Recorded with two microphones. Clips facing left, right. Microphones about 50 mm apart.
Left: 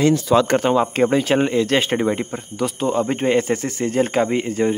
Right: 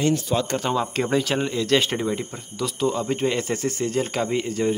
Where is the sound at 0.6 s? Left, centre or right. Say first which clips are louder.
Left 7 dB; left.